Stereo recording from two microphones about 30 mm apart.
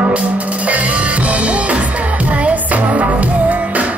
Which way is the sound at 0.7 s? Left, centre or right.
Right.